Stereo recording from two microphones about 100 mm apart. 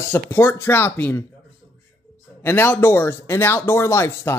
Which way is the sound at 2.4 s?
20° left (ahead or behind).